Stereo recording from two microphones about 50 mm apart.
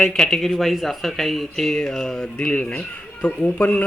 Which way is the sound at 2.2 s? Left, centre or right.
Centre.